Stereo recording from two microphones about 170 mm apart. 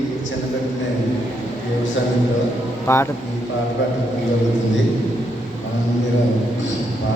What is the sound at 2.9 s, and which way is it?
Speech, 15° left (ahead or behind).